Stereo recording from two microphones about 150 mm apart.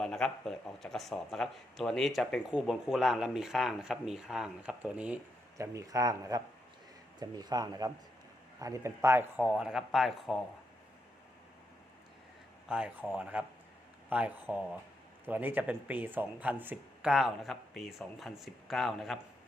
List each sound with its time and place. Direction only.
0.0 s speech: 5° left (ahead or behind)
5.5 s speech: 20° right (ahead or behind)
9.5 s speech: 5° right (ahead or behind)
12.6 s speech: 5° right (ahead or behind)